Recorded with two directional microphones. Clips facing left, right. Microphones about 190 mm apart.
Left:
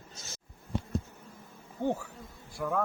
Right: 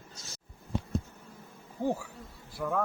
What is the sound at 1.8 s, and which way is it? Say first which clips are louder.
Speech: even; 10° right (ahead or behind).